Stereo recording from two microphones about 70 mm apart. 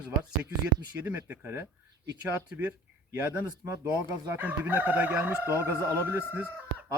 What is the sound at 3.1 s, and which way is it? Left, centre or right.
Speech, right.